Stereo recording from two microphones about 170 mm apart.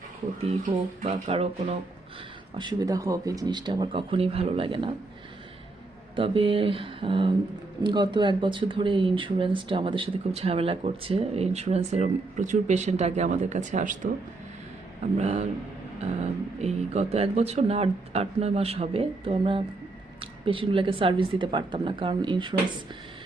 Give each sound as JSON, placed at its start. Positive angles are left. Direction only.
{"t": 0.4, "sound": "speech", "side_deg": -35}
{"t": 2.6, "sound": "speech", "side_deg": -25}
{"t": 6.1, "sound": "speech", "side_deg": -30}
{"t": 15.2, "sound": "speech", "side_deg": -40}
{"t": 16.6, "sound": "speech", "side_deg": -40}